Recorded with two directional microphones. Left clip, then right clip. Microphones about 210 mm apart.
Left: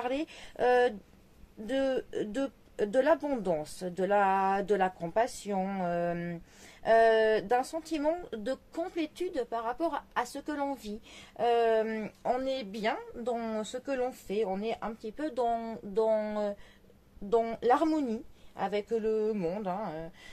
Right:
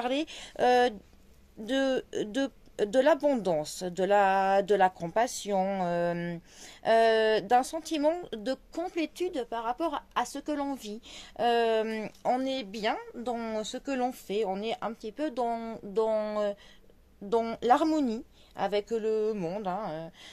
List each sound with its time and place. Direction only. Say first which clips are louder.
0.0 s speech: right 3 dB; 45° right (ahead or behind)